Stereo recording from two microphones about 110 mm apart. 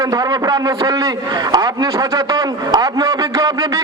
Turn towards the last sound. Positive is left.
turn(degrees=-30)  # may be behind; listen again after turning